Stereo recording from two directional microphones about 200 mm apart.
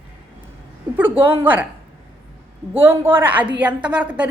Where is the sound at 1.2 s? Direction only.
10° right (ahead or behind).